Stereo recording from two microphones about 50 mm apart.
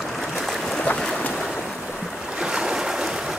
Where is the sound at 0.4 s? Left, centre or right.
Centre.